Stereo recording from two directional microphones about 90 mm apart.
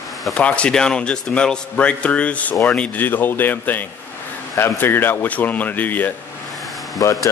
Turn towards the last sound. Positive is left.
turn(degrees=35)  # may be behind; listen again after turning